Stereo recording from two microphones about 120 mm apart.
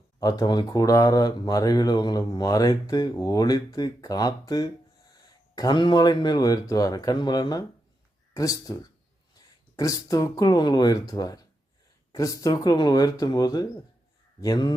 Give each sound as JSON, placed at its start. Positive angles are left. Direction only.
{"t": 0.2, "sound": "speech", "side_deg": 30}